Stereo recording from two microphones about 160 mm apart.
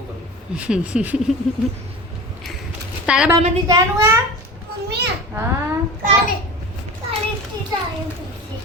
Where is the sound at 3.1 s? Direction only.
5° right (ahead or behind).